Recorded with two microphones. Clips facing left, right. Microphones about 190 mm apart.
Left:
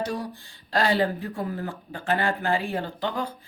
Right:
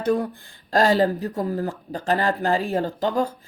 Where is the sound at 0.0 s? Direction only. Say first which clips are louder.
Right 8 dB; 55° right (ahead or behind).